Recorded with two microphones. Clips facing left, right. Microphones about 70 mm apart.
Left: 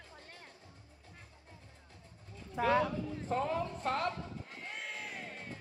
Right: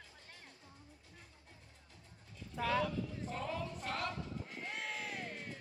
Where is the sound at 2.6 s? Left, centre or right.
Left.